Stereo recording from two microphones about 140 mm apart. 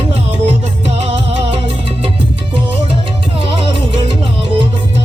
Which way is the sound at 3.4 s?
40° right (ahead or behind).